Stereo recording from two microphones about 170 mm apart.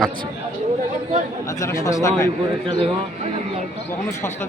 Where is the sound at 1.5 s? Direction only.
20° left (ahead or behind).